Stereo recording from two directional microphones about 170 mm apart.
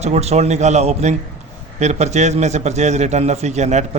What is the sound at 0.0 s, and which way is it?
A man's voice, 40° right (ahead or behind).